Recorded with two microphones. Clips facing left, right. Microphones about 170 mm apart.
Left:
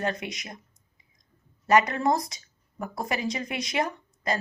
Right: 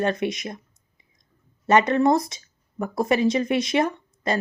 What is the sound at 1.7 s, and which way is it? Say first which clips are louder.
Speech: right 4 dB; 25° right (ahead or behind).